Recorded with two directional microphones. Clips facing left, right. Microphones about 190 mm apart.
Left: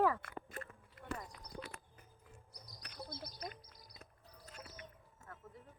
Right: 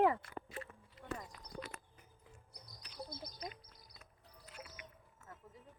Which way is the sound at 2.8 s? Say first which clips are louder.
Left 3 dB; 60° left (ahead or behind).